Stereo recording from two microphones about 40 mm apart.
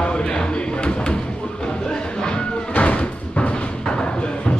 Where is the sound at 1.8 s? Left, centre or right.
Left.